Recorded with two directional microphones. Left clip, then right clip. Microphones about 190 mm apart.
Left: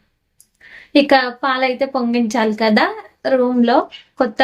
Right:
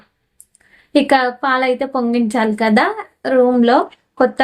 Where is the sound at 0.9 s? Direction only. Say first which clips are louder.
Even; 10° right (ahead or behind).